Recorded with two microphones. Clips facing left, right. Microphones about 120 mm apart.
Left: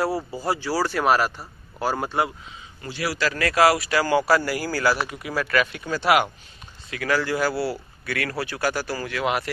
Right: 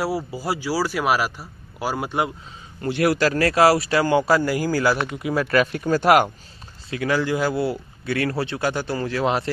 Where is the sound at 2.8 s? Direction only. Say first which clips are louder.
Right 7 dB; 55° right (ahead or behind).